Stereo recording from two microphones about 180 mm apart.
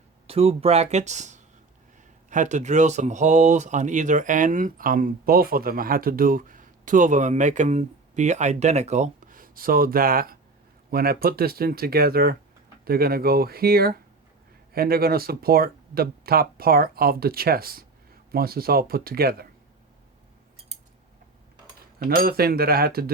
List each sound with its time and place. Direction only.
0.3 s speech: 35° right (ahead or behind); by 19.5 s 55° right (ahead or behind)
21.9 s speech: 55° right (ahead or behind)